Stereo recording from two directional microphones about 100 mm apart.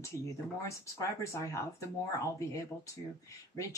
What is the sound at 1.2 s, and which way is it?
Speech, 30° left (ahead or behind).